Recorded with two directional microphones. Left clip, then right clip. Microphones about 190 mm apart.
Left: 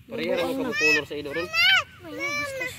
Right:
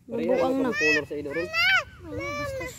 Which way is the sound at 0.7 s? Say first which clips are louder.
Left 1 dB; 50° left (ahead or behind).